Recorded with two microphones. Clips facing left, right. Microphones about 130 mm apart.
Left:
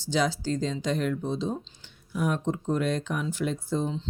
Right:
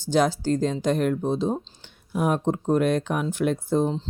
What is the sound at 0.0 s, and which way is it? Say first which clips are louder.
Speech: right 5 dB; 50° right (ahead or behind).